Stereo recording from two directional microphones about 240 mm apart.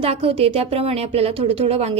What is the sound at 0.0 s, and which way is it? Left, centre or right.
Speech, right.